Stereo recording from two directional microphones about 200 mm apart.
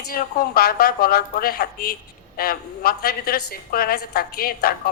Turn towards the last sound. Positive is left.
turn(degrees=50)  # may be behind; listen again after turning